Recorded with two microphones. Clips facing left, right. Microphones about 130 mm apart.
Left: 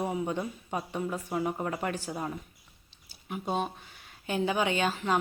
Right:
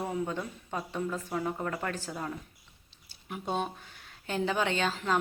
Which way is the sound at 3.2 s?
5° left (ahead or behind).